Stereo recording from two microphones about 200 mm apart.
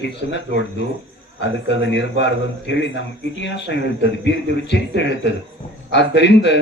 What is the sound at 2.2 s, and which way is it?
A man's voice, 60° left (ahead or behind).